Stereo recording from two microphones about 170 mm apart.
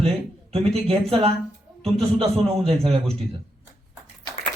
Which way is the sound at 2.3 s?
35° right (ahead or behind).